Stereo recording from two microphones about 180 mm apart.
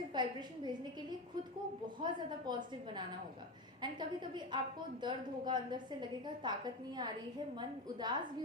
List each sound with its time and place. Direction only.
0.1 s a woman's voice: 25° right (ahead or behind)
2.0 s a woman's voice: 25° right (ahead or behind)